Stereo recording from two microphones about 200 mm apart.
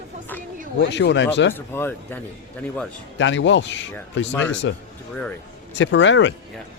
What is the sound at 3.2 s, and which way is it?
Speech, 65° left (ahead or behind).